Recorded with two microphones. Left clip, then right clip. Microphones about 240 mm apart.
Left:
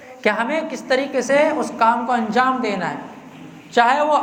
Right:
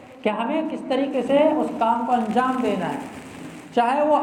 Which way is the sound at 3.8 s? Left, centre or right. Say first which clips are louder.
Left 4 dB; left.